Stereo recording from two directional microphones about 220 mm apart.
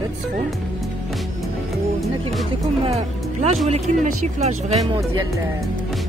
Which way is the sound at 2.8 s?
30° right (ahead or behind).